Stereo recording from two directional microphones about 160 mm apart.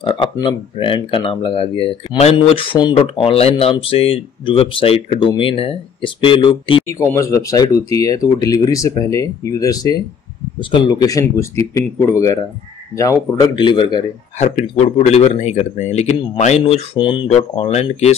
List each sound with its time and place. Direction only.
0.0 s speech: 30° left (ahead or behind)
6.9 s speech: 20° left (ahead or behind)
13.4 s speech: 30° left (ahead or behind)
14.4 s speech: 45° left (ahead or behind)